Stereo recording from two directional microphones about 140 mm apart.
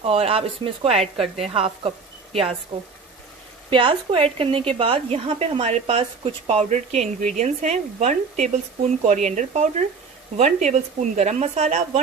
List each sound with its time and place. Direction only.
0.0 s speech: 45° right (ahead or behind)